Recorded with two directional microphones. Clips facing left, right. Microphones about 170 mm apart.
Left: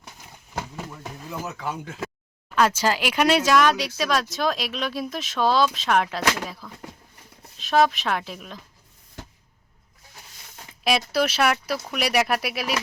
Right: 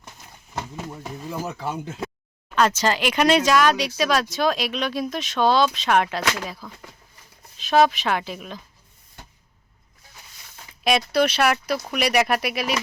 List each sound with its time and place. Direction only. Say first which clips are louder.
1.3 s speech: right 2 dB; 30° right (ahead or behind)
2.6 s speech: right 1 dB; 5° left (ahead or behind)
10.8 s speech: right 3 dB; centre (ahead or behind)